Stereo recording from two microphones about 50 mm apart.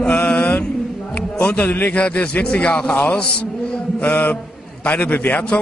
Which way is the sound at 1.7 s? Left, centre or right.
Left.